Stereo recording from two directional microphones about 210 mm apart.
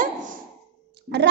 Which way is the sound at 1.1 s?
55° right (ahead or behind).